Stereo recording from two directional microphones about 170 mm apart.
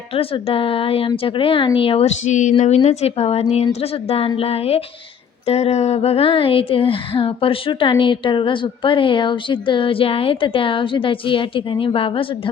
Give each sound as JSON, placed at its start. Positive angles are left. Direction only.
{"t": 0.1, "sound": "speech", "side_deg": 35}